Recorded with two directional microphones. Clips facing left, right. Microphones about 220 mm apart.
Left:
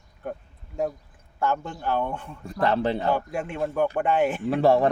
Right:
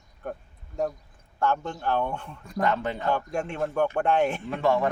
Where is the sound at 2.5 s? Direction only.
35° left (ahead or behind).